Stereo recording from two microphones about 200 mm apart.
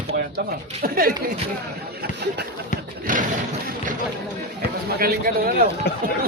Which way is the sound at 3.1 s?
40° right (ahead or behind).